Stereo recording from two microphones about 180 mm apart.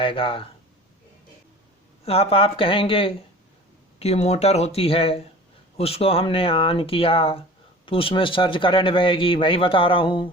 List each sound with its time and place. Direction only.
0.0 s speech: 30° left (ahead or behind)
2.0 s speech: 30° left (ahead or behind)